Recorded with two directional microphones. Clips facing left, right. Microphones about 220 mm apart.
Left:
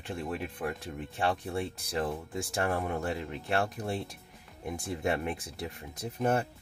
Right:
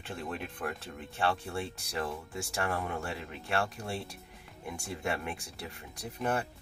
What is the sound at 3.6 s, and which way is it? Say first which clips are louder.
Speech: left 3 dB; 20° left (ahead or behind).